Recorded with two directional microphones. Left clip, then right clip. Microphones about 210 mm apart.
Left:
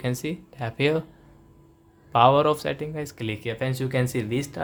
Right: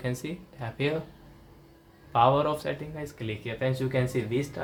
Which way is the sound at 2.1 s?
45° left (ahead or behind).